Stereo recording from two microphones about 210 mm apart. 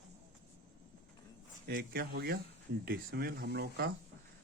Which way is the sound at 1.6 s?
45° right (ahead or behind).